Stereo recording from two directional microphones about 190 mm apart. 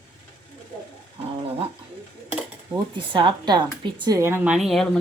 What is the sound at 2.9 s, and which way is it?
A woman's voice, 25° right (ahead or behind).